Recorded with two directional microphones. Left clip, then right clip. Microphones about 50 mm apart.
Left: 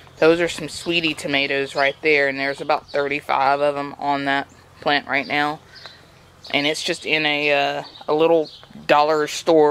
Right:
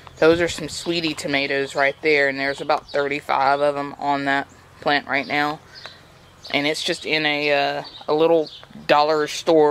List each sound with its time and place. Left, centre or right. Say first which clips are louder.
0.2 s speech: even; centre
1.8 s speech: even; left
2.0 s speech: left 1 dB; centre
8.8 s speech: left 1 dB; left